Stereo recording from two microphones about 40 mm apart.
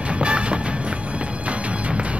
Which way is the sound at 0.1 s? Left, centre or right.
Right.